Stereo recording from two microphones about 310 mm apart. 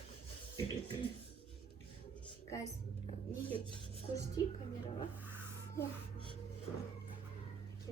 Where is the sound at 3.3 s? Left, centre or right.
Centre.